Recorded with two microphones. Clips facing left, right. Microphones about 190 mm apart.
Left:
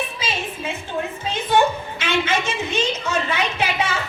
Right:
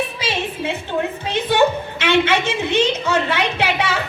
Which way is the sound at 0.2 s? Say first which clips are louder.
Right 4 dB; 65° right (ahead or behind).